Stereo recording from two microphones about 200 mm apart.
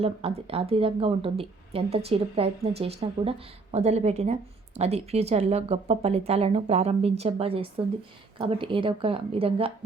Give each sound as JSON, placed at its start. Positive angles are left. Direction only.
{"t": 0.0, "sound": "a woman's voice", "side_deg": -30}